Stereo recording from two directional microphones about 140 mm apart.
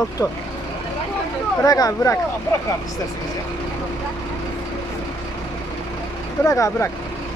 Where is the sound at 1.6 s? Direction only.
25° left (ahead or behind).